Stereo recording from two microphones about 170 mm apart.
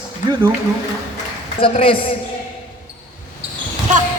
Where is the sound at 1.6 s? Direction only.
30° left (ahead or behind).